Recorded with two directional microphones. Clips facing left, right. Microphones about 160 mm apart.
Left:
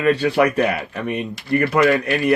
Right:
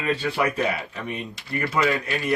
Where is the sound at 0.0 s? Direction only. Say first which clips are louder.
Left 8 dB; 70° left (ahead or behind).